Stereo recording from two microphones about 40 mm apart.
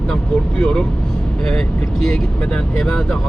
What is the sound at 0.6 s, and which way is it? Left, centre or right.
Speech, left.